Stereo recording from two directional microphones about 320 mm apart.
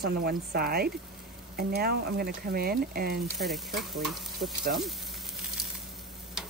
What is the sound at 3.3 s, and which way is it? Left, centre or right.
Stir, centre.